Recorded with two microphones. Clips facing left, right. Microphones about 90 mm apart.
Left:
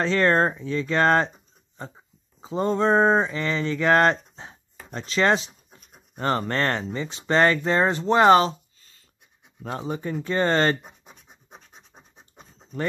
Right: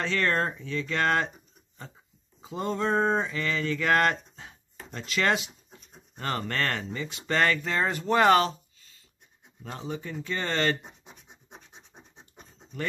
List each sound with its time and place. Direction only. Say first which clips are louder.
0.0 s speech: left 7 dB; 35° left (ahead or behind)
2.4 s speech: left 7 dB; 35° left (ahead or behind)
9.6 s speech: left 6 dB; 40° left (ahead or behind)